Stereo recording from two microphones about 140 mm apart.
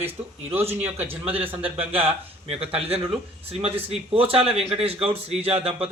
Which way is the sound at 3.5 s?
45° right (ahead or behind).